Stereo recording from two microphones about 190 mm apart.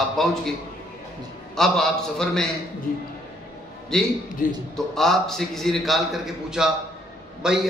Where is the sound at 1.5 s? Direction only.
Centre (ahead or behind).